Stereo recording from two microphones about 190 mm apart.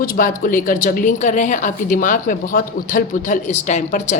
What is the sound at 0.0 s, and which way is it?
A woman's voice, 45° left (ahead or behind).